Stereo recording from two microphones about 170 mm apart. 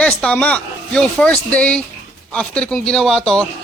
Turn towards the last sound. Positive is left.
turn(degrees=5)  # may be behind; listen again after turning